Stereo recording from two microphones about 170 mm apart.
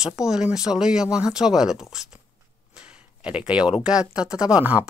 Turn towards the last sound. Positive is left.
turn(degrees=-10)  # may be behind; listen again after turning